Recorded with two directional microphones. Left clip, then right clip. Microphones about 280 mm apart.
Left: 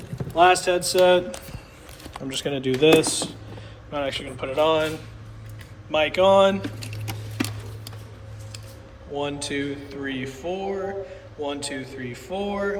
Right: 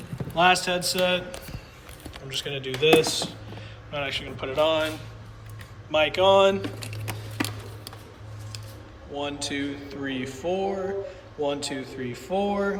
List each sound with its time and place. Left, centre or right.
0.3 s speech: centre; by 3.3 s left
3.9 s speech: centre
5.9 s speech: centre
7.1 s music: centre
9.1 s speech: centre